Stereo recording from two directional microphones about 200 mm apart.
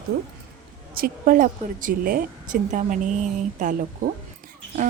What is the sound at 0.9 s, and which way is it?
A woman's voice, 45° right (ahead or behind).